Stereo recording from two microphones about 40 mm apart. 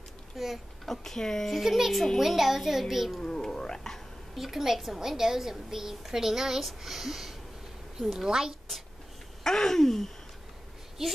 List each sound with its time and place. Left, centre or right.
0.3 s a child's voice: centre
0.8 s speech: centre
1.6 s a child's voice: centre
3.5 s cat: centre
4.4 s a woman's voice: centre
9.4 s a sound: centre